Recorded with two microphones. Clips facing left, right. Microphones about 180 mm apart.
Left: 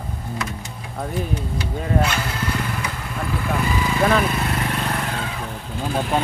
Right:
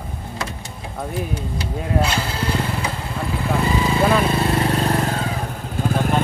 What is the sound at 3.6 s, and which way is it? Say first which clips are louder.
Vehicle: right 3 dB; 25° right (ahead or behind).